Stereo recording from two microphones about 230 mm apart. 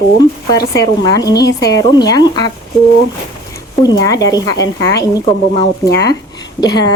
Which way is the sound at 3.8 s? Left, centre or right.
Centre.